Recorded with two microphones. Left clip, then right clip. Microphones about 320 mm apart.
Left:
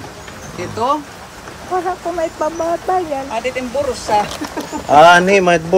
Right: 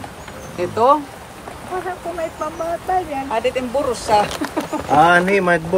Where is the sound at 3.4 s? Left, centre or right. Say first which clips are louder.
Right 3 dB; right.